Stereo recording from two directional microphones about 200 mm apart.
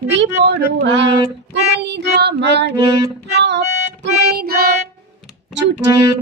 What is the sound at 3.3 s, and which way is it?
Music, 60° right (ahead or behind).